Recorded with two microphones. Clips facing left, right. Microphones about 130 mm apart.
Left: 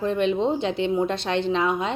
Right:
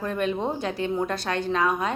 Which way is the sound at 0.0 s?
25° left (ahead or behind).